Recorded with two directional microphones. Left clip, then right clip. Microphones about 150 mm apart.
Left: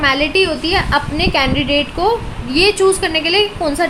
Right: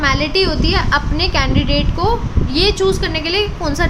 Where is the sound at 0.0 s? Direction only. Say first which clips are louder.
Left 2 dB; 25° left (ahead or behind).